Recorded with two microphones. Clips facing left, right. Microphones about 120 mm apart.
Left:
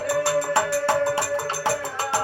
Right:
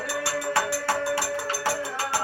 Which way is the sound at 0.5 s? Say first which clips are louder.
Left 5 dB; 20° left (ahead or behind).